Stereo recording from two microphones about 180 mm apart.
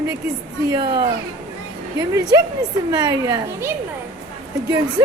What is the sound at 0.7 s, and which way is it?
Speech, 30° right (ahead or behind).